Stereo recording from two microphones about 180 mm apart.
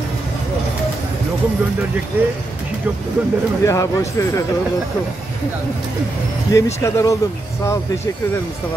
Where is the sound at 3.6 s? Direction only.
15° left (ahead or behind).